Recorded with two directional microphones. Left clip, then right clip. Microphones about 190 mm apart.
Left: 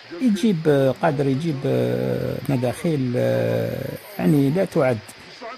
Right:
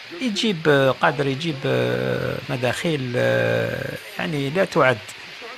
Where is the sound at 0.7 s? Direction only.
35° left (ahead or behind).